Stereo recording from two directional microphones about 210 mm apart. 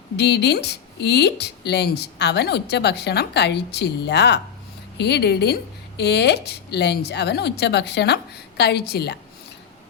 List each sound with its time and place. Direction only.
0.2 s speech: 55° left (ahead or behind)